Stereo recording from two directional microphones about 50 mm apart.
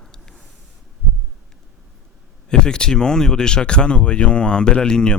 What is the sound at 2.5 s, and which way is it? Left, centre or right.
Speech, centre.